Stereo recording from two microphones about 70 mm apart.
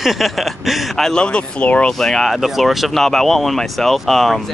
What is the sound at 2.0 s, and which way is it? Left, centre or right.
Speech, centre.